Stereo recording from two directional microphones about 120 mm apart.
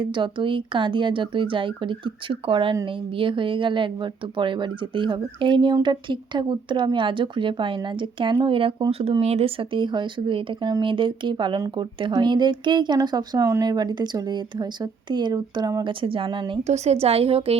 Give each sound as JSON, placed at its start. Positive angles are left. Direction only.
{"t": 0.0, "sound": "speech", "side_deg": -40}
{"t": 15.9, "sound": "speech", "side_deg": -45}
{"t": 16.6, "sound": "a woman's voice", "side_deg": -65}